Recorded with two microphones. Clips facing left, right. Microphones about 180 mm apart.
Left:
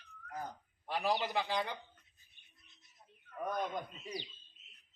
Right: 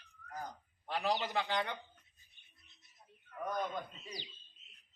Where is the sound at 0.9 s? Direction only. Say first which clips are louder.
Left 1 dB; 10° left (ahead or behind).